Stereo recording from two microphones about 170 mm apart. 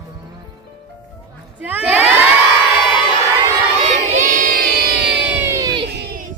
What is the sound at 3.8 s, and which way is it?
Crowd, 40° right (ahead or behind).